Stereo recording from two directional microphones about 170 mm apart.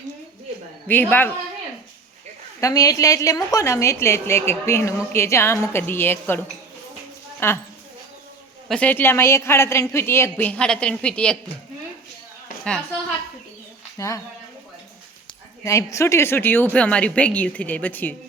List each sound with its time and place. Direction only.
0.9 s a woman's voice: 10° left (ahead or behind)
2.6 s a woman's voice: 20° left (ahead or behind)
8.7 s a woman's voice: 10° left (ahead or behind)
14.0 s a woman's voice: 15° left (ahead or behind)
15.3 s a woman's voice: 20° left (ahead or behind)